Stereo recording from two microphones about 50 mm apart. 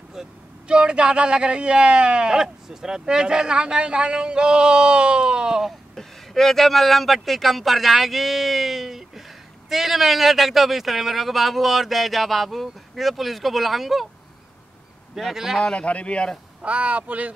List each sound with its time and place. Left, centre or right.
0.7 s speech: centre
5.7 s speech: centre
15.1 s speech: centre
15.6 s a man's voice: centre
16.6 s speech: right